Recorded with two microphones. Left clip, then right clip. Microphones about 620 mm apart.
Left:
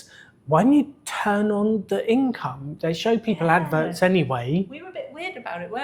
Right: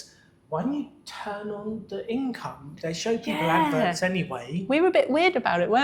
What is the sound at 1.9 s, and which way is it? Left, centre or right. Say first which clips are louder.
A woman's voice: left 5 dB; left.